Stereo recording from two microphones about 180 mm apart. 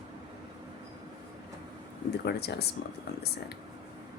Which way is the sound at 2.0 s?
65° left (ahead or behind).